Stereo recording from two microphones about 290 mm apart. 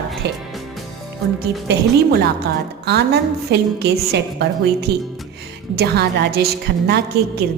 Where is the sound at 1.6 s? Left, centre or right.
Right.